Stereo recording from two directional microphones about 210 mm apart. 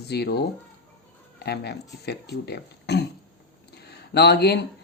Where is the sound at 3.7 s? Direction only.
50° left (ahead or behind).